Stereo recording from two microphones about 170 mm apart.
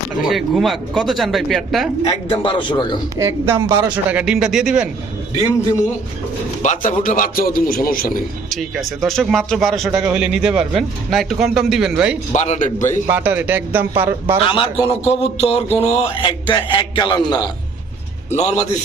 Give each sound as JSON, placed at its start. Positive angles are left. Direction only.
{"t": 0.3, "sound": "a man's voice", "side_deg": 0}
{"t": 2.0, "sound": "a man's voice", "side_deg": 30}
{"t": 3.2, "sound": "speech", "side_deg": -15}
{"t": 6.6, "sound": "speech", "side_deg": 50}
{"t": 8.4, "sound": "a man's voice", "side_deg": 0}
{"t": 12.3, "sound": "a man's voice", "side_deg": 40}
{"t": 13.1, "sound": "speech", "side_deg": -10}
{"t": 14.4, "sound": "speech", "side_deg": 30}
{"t": 18.3, "sound": "speech", "side_deg": 40}